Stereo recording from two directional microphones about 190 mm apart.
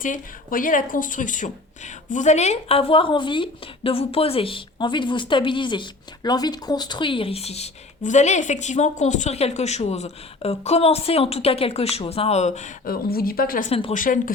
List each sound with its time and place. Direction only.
0.0 s speech: 45° left (ahead or behind)
13.7 s speech: 30° left (ahead or behind)
13.9 s speech: 45° left (ahead or behind)